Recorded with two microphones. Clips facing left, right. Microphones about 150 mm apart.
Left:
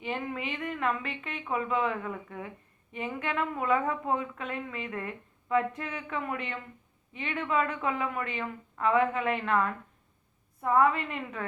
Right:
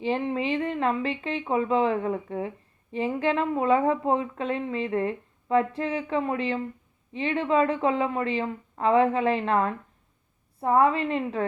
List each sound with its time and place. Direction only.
0.0 s a woman's voice: 30° right (ahead or behind)